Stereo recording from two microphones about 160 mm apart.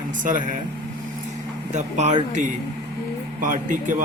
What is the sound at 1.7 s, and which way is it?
Speech, 45° right (ahead or behind).